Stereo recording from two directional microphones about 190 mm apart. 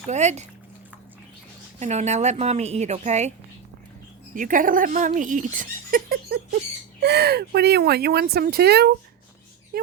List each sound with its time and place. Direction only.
0.1 s a woman's voice: 35° right (ahead or behind)
1.8 s a woman's voice: 35° right (ahead or behind)
4.4 s speech: 45° right (ahead or behind)